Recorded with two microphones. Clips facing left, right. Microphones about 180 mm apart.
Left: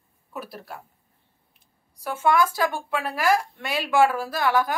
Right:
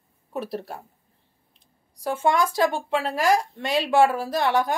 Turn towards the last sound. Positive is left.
turn(degrees=-20)  # may be behind; listen again after turning